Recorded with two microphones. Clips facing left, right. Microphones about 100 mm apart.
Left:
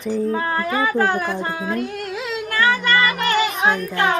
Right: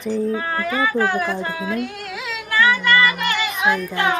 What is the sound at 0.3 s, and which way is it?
Speech, 35° left (ahead or behind).